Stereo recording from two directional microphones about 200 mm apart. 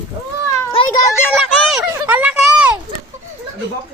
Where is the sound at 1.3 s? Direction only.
Centre (ahead or behind).